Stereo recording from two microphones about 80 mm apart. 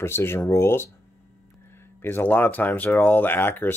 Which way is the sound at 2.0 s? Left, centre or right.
Left.